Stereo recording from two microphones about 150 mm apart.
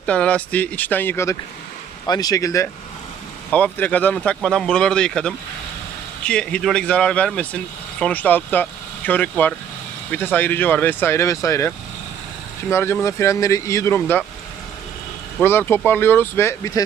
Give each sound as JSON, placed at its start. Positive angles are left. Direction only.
{"t": 0.0, "sound": "speech", "side_deg": 10}
{"t": 3.5, "sound": "speech", "side_deg": 10}
{"t": 12.7, "sound": "speech", "side_deg": 15}
{"t": 15.4, "sound": "speech", "side_deg": 15}